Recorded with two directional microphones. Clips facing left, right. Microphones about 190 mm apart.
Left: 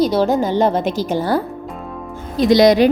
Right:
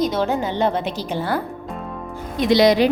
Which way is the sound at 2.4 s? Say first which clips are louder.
Left 4 dB; 45° left (ahead or behind).